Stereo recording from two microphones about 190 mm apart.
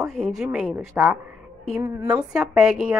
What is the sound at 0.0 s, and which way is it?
Speech, centre (ahead or behind).